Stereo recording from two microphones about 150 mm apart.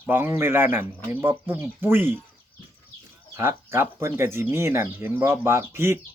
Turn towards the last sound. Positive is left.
turn(degrees=-15)  # may be behind; listen again after turning